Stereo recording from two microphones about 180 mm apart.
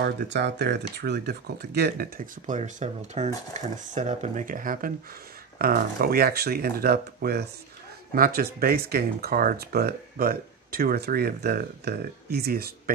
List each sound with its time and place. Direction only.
0.0 s speech: 75° right (ahead or behind); by 12.9 s 55° right (ahead or behind)